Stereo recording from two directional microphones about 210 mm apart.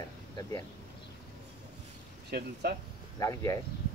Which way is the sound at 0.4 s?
15° left (ahead or behind).